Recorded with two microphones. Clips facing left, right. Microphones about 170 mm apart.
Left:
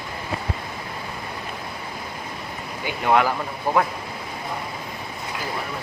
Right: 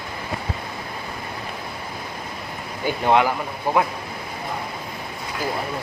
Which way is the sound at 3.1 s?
20° right (ahead or behind).